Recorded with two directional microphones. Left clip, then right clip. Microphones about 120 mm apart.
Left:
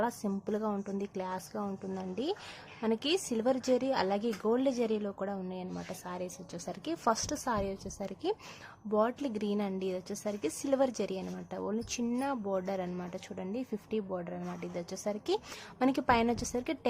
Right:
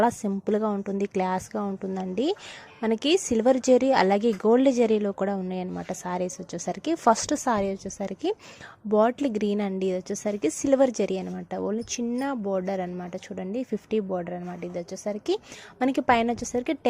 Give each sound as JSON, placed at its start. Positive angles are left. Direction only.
{"t": 0.4, "sound": "a woman's voice", "side_deg": -50}